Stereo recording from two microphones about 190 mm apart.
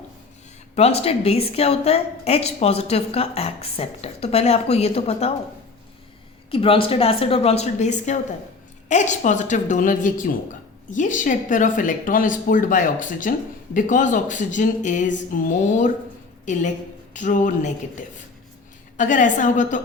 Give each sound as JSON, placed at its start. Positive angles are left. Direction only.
{"t": 0.8, "sound": "a woman's voice", "side_deg": 30}
{"t": 6.5, "sound": "a woman's voice", "side_deg": 30}